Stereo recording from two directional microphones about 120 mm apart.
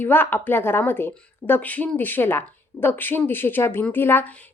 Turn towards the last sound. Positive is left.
turn(degrees=15)  # may be behind; listen again after turning